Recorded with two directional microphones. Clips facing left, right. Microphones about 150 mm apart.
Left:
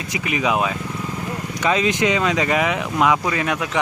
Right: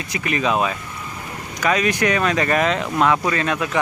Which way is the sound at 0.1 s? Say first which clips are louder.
Even; 15° left (ahead or behind).